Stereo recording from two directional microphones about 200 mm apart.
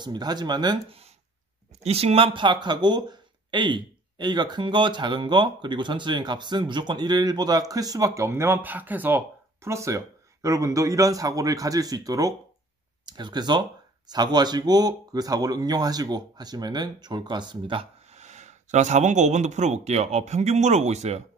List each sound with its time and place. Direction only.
0.0 s speech: 20° right (ahead or behind)